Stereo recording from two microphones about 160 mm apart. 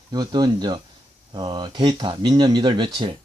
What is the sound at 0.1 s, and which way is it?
Speech, 25° right (ahead or behind).